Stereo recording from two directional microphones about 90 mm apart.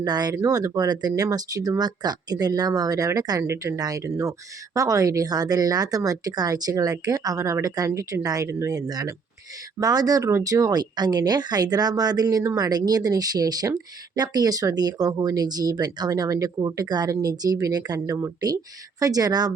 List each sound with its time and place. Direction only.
0.0 s speech: 45° right (ahead or behind)
3.4 s speech: 30° right (ahead or behind)
3.8 s speech: 45° right (ahead or behind)
18.0 s speech: 30° right (ahead or behind)
18.3 s speech: 40° right (ahead or behind)